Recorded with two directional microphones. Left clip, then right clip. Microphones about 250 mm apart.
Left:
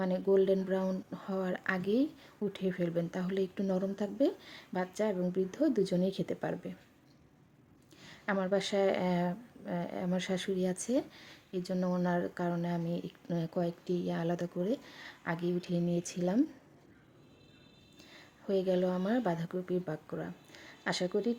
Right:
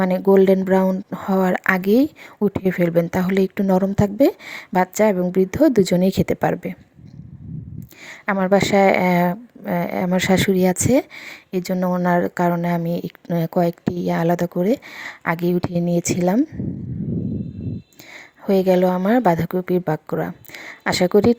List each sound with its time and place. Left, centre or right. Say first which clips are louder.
0.0 s speech: right 14 dB; right
8.0 s speech: right 13 dB; right
18.4 s speech: right 15 dB; right